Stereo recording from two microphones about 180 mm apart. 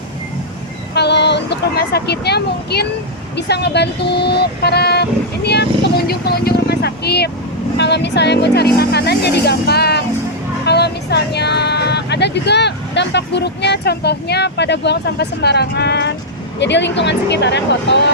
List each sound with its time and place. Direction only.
0.9 s speech: 70° left (ahead or behind)